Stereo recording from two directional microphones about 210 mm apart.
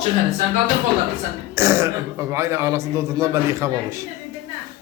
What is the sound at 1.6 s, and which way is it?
Speech, 10° right (ahead or behind).